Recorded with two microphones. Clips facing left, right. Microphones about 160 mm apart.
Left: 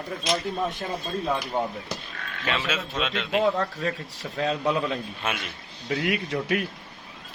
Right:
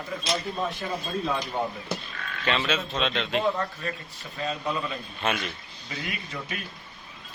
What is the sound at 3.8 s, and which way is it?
Speech, 90° left.